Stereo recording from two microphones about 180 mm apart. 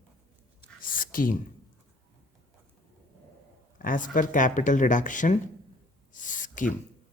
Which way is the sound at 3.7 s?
50° left (ahead or behind).